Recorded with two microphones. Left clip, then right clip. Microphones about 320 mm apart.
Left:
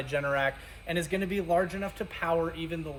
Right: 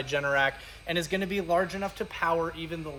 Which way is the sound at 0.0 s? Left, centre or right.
Centre.